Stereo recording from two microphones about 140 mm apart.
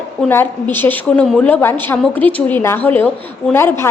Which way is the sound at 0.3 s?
15° left (ahead or behind).